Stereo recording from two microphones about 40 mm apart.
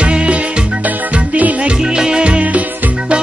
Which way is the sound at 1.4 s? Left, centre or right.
Right.